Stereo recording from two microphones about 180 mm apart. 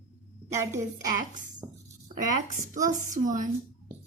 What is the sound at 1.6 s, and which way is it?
Music, 15° right (ahead or behind).